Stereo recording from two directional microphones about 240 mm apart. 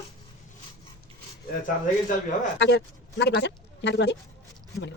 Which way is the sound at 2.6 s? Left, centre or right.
Left.